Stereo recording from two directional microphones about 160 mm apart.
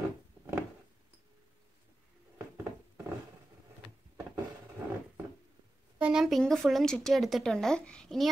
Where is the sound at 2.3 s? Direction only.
10° right (ahead or behind).